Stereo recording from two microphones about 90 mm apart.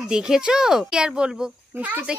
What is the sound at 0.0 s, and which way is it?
Speech, 5° right (ahead or behind).